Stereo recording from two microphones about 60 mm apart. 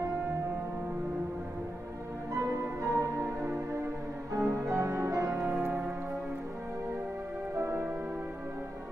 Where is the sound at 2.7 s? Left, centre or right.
Right.